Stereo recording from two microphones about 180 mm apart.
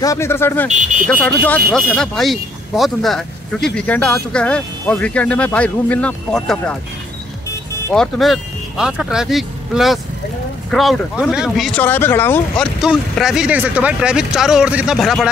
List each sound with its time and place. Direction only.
0.0 s speech: 15° left (ahead or behind)
0.7 s speech: 45° right (ahead or behind)
1.0 s speech: 10° left (ahead or behind)
7.9 s speech: centre (ahead or behind)
12.8 s speech: 5° right (ahead or behind)